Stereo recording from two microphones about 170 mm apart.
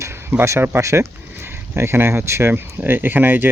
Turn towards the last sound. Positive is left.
turn(degrees=-10)  # may be behind; listen again after turning